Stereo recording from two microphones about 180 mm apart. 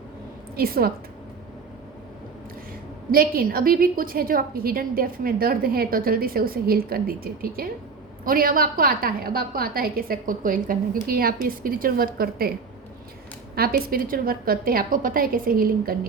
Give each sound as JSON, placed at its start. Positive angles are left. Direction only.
{"t": 0.5, "sound": "a woman's voice", "side_deg": -55}
{"t": 3.1, "sound": "a woman's voice", "side_deg": -55}
{"t": 13.6, "sound": "a woman's voice", "side_deg": -55}